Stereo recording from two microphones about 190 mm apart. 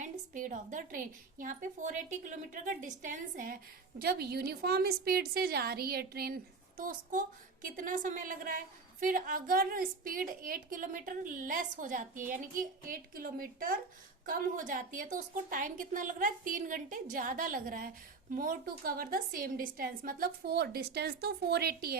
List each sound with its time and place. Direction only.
0.0 s a woman's voice: 40° right (ahead or behind)